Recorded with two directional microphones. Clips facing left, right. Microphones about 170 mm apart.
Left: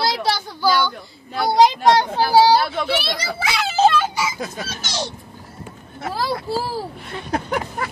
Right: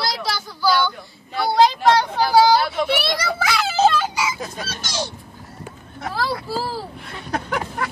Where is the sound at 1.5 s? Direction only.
20° left (ahead or behind).